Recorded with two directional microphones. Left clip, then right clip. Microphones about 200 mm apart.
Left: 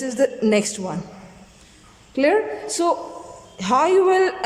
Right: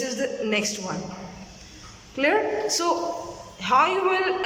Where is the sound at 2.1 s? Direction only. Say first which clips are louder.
Left 3 dB; 25° left (ahead or behind).